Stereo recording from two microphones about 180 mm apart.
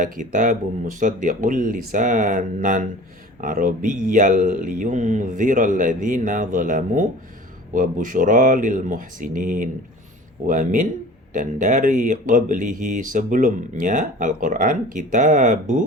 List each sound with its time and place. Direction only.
0.0 s speech: 45° right (ahead or behind)